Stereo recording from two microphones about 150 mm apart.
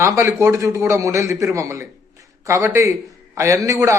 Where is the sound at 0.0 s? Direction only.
20° right (ahead or behind).